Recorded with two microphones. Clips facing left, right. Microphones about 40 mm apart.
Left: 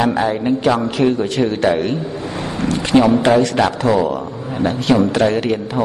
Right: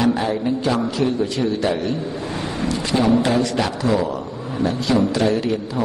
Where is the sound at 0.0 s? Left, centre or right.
Left.